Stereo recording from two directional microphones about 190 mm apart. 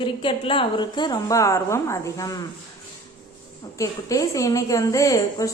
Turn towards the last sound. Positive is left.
turn(degrees=15)  # may be behind; listen again after turning